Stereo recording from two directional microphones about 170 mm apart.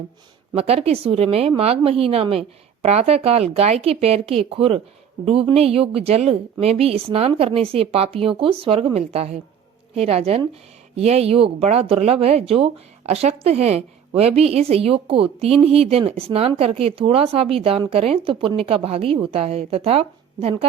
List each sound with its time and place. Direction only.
0.5 s speech: 35° right (ahead or behind)